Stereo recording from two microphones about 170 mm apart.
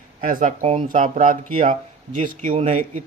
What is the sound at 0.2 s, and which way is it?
A man's voice, 55° right (ahead or behind).